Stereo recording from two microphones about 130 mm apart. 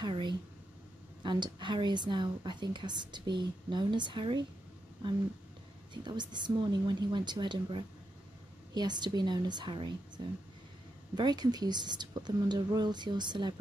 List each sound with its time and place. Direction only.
0.0 s a sound: 35° right (ahead or behind)
1.2 s a woman's voice: 35° right (ahead or behind)
6.0 s a woman's voice: 35° right (ahead or behind)